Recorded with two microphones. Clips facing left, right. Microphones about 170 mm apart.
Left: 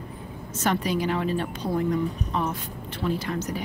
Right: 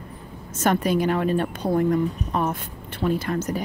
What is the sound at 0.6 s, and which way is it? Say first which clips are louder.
A woman's voice: right 4 dB; 50° right (ahead or behind).